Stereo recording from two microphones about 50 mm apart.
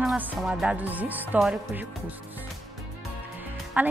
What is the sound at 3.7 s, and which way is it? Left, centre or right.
Speech, right.